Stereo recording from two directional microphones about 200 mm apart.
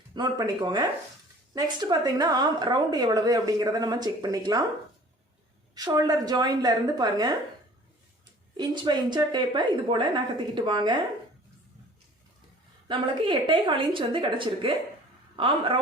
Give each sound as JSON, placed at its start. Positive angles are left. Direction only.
{"t": 0.1, "sound": "a woman's voice", "side_deg": -20}
{"t": 5.7, "sound": "a woman's voice", "side_deg": -20}
{"t": 8.5, "sound": "a woman's voice", "side_deg": -20}
{"t": 12.9, "sound": "a woman's voice", "side_deg": -20}